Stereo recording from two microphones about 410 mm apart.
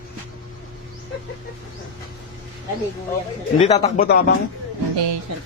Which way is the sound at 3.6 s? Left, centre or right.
Centre.